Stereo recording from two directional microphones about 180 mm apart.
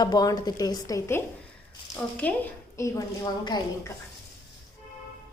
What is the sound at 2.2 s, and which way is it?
A woman's voice, 10° left (ahead or behind).